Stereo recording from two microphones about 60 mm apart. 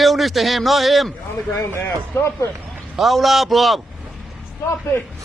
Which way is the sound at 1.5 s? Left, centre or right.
Left.